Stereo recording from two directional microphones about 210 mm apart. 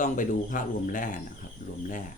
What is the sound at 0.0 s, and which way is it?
Speech, 40° left (ahead or behind).